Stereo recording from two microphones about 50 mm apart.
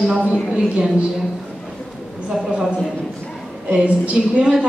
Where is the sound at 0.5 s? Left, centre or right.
Centre.